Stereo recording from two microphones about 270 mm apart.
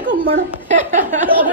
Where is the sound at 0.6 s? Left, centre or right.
Right.